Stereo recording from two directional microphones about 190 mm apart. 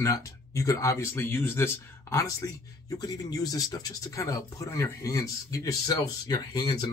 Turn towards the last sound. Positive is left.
turn(degrees=20)  # may be behind; listen again after turning